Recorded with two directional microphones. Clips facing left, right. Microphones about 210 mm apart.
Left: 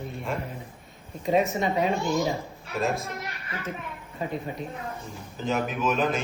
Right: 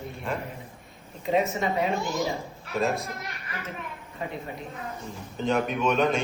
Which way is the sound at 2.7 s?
Centre (ahead or behind).